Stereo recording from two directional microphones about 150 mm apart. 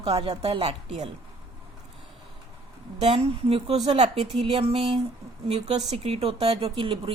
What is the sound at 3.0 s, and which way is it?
Speech, 40° right (ahead or behind).